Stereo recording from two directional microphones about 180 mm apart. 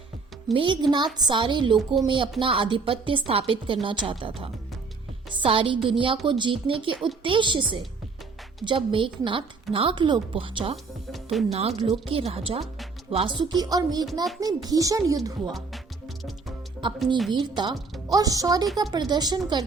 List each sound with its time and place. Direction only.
0.5 s a woman's voice: 25° right (ahead or behind)
11.1 s music: centre (ahead or behind)
11.8 s a woman's voice: 30° right (ahead or behind)
16.8 s a woman's voice: 25° right (ahead or behind)